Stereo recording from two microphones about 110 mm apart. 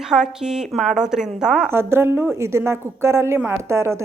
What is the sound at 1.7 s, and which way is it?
A woman's voice, 20° right (ahead or behind).